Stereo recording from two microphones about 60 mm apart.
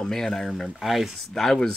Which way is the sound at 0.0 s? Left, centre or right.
Centre.